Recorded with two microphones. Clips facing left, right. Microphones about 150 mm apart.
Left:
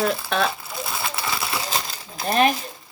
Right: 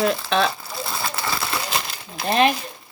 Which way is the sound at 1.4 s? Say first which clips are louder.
Right 1 dB; 25° left (ahead or behind).